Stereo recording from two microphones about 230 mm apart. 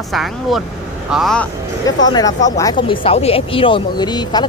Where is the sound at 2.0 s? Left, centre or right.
Centre.